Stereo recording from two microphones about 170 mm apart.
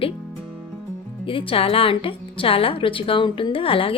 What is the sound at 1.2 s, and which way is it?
A woman's voice, 30° left (ahead or behind).